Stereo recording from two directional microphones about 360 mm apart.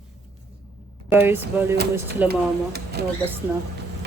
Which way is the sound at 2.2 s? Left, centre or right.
Right.